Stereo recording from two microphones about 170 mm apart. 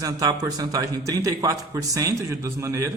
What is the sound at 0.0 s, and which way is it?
A man's voice, 20° right (ahead or behind).